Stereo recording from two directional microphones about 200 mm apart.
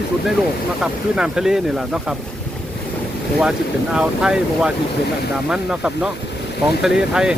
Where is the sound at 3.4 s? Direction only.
5° right (ahead or behind).